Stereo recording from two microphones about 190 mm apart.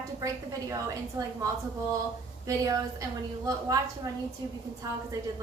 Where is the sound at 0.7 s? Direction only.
15° right (ahead or behind).